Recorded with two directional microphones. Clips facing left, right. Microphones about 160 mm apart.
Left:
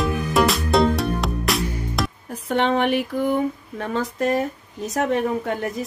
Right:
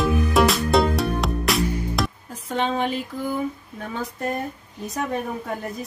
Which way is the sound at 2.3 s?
65° left (ahead or behind).